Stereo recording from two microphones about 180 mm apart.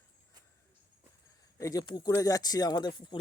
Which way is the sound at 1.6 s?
20° left (ahead or behind).